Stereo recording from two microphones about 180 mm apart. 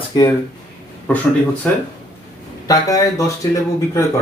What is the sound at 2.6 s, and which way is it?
Speech, 20° left (ahead or behind).